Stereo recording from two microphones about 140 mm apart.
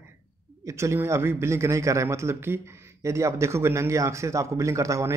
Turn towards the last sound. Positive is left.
turn(degrees=-20)  # may be behind; listen again after turning